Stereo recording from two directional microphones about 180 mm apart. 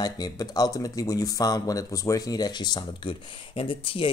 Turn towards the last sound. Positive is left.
turn(degrees=30)  # may be behind; listen again after turning